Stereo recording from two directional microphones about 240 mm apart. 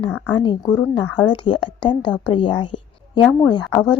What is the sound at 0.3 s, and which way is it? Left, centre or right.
A woman's voice, centre.